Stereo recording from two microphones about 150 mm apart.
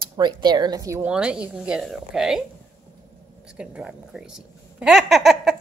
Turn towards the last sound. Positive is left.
turn(degrees=0)  # may be behind; listen again after turning